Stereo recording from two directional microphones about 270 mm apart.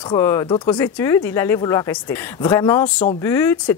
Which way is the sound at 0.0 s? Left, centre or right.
Centre.